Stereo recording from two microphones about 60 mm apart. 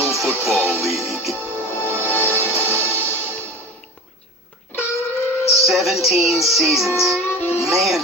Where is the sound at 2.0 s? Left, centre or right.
Left.